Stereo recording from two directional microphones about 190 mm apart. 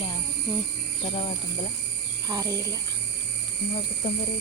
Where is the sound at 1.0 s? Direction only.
35° left (ahead or behind).